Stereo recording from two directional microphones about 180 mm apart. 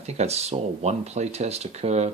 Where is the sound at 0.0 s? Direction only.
35° right (ahead or behind).